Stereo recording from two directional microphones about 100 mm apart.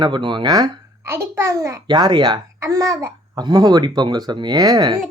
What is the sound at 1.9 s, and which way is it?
Speech, 50° right (ahead or behind).